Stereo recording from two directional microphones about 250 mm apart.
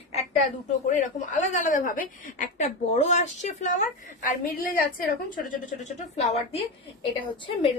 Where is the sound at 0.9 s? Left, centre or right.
Left.